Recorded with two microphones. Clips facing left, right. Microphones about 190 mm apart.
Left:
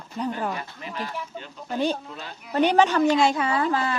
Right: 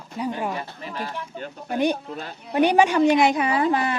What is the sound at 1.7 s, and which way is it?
A woman's voice, 15° right (ahead or behind).